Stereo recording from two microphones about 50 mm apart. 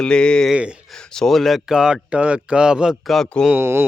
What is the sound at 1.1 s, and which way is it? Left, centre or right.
Speech, centre.